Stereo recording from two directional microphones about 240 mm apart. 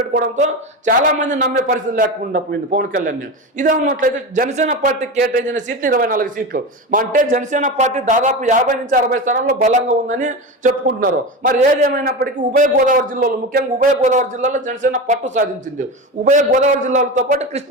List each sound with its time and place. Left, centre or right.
0.1 s a man's voice: right